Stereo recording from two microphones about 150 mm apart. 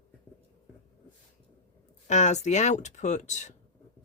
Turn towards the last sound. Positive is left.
turn(degrees=50)  # may be behind; listen again after turning